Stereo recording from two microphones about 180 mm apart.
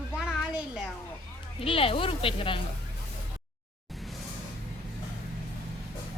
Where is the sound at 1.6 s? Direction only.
30° left (ahead or behind).